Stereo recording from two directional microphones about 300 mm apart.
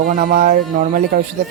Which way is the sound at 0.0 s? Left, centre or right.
Right.